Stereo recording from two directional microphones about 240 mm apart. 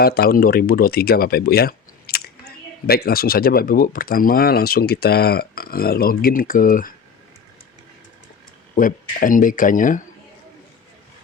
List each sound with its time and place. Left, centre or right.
0.0 s speech: left
8.7 s speech: left